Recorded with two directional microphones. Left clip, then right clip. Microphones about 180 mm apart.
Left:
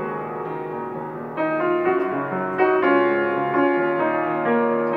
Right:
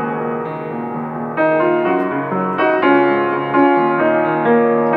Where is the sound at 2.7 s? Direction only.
40° right (ahead or behind).